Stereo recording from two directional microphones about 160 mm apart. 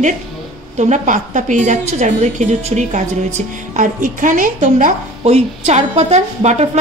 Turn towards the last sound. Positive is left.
turn(degrees=-45)  # may be behind; listen again after turning